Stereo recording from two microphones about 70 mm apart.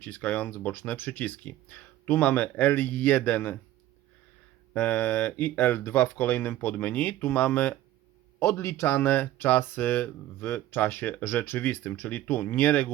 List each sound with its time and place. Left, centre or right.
0.0 s speech: left
4.7 s speech: left
8.4 s a man's voice: left
8.9 s speech: left